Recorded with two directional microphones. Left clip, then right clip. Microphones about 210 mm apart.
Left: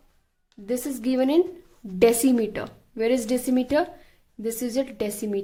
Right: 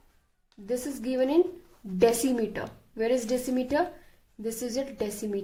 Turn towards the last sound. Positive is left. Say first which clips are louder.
# left 4 dB
turn(degrees=35)  # may be behind; listen again after turning